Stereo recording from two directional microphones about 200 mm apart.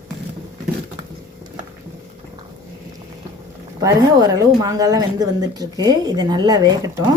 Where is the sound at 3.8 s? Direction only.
15° right (ahead or behind).